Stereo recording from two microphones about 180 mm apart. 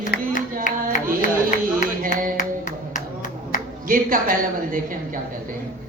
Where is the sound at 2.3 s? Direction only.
45° left (ahead or behind).